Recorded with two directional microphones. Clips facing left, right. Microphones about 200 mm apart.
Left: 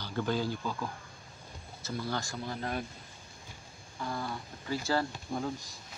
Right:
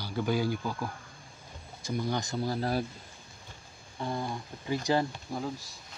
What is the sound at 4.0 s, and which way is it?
Speech, 25° right (ahead or behind).